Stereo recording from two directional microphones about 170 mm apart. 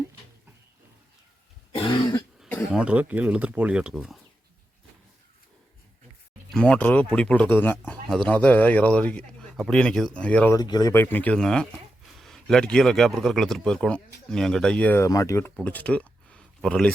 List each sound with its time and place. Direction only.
1.7 s throat clearing: 30° left (ahead or behind)
2.7 s speech: 5° right (ahead or behind)
6.5 s a man's voice: 5° left (ahead or behind)
10.6 s a man's voice: 20° left (ahead or behind); by 16.9 s 5° left (ahead or behind)